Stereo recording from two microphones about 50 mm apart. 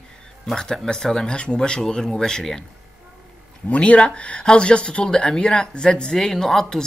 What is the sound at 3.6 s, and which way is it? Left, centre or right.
Speech, left.